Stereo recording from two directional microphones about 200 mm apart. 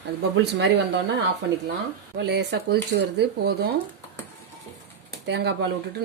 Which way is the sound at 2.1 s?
55° right (ahead or behind).